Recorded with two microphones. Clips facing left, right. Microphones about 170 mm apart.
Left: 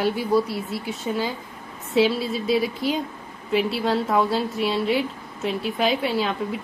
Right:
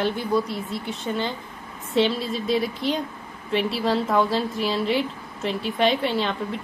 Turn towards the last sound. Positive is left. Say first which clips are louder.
# left 1 dB
turn(degrees=5)  # may be behind; listen again after turning